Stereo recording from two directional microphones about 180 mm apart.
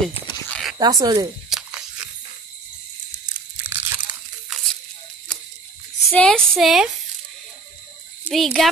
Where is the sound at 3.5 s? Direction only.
10° right (ahead or behind).